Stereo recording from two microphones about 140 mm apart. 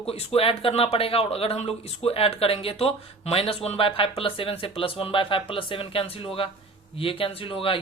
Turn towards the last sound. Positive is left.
turn(degrees=40)  # may be behind; listen again after turning